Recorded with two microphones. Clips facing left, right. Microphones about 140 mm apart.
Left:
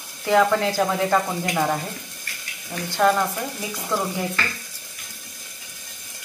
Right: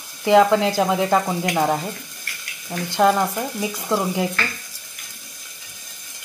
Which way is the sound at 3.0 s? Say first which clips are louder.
Right 2 dB; 20° right (ahead or behind).